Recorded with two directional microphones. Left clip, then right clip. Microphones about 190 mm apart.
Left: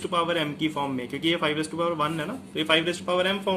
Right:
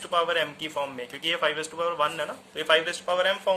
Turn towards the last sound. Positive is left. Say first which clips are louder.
# right 1 dB
turn(degrees=-20)  # may be behind; listen again after turning